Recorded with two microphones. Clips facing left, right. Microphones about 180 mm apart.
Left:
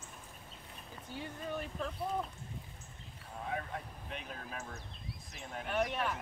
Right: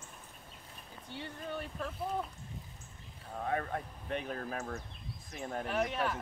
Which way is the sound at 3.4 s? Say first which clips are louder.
Right 5 dB; 55° right (ahead or behind).